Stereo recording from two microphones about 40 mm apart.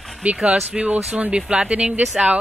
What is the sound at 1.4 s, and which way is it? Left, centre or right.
Speech, right.